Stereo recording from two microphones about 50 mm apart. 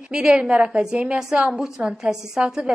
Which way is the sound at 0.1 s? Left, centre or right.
Centre.